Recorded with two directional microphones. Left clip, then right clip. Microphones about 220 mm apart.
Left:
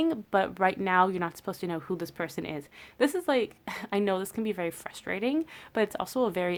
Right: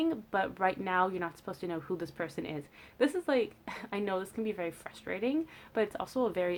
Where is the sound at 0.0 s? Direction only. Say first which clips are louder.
Left 5 dB; 40° left (ahead or behind).